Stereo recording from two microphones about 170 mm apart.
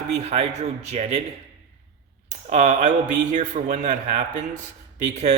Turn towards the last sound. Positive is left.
turn(degrees=-40)  # may be behind; listen again after turning